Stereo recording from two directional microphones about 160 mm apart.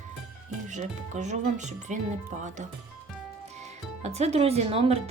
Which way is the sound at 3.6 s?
45° right (ahead or behind).